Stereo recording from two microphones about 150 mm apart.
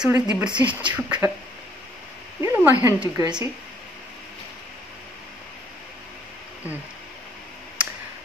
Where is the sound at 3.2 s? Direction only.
30° right (ahead or behind).